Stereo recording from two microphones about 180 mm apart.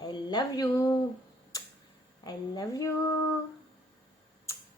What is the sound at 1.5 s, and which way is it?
Tick-tock, 20° left (ahead or behind).